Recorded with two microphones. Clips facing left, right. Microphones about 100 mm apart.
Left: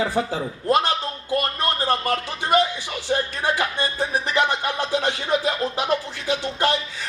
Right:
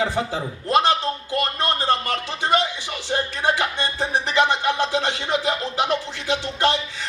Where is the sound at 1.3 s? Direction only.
25° right (ahead or behind).